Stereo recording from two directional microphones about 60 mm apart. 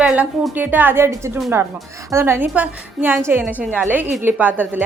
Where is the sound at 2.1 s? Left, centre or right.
Right.